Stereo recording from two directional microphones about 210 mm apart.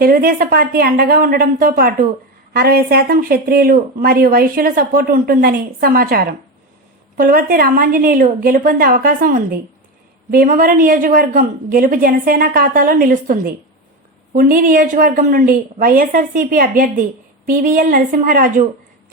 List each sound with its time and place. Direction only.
0.0 s a woman's voice: 45° right (ahead or behind)